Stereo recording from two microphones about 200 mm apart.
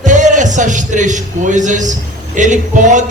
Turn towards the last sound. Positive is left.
turn(degrees=-40)  # may be behind; listen again after turning